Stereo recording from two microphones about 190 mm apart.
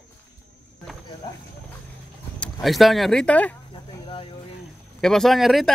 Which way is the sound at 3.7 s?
30° left (ahead or behind).